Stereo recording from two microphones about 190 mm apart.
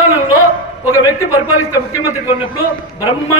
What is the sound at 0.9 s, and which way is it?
Speech, 15° left (ahead or behind).